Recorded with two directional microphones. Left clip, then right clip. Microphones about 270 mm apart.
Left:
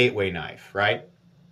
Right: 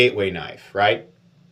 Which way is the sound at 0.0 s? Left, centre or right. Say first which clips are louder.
Right 4 dB; centre.